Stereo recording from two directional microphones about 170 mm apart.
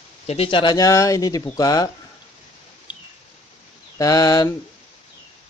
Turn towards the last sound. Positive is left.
turn(degrees=20)  # may be behind; listen again after turning